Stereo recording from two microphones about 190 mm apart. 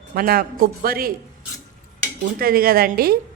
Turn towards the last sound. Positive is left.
turn(degrees=-50)  # may be behind; listen again after turning